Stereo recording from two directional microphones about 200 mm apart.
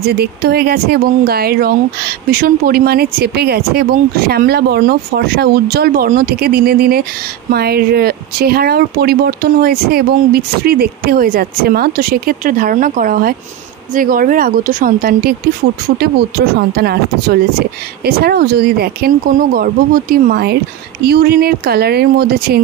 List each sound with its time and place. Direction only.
0.0 s speech: 50° right (ahead or behind)